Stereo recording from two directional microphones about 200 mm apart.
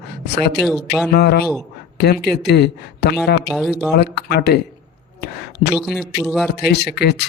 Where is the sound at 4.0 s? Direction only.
50° left (ahead or behind).